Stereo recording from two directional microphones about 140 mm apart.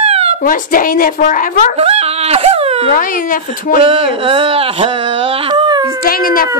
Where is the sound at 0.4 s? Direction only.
80° left.